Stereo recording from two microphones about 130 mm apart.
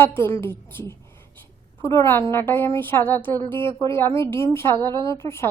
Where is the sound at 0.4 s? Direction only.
15° left (ahead or behind).